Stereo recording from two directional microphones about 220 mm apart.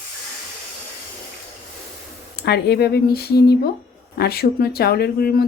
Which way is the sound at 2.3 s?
50° left (ahead or behind).